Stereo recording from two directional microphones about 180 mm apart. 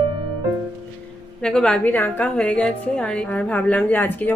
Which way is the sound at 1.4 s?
5° left (ahead or behind).